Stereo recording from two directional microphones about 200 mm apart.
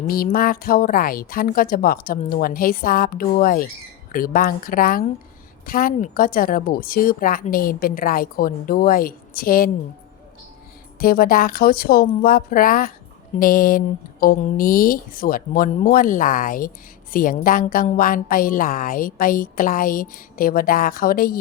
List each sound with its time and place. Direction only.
0.1 s speech: 45° left (ahead or behind)
11.0 s speech: 50° left (ahead or behind)